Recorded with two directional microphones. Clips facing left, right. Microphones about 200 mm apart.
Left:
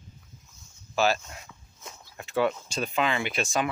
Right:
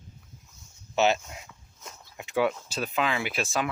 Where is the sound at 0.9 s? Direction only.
20° right (ahead or behind).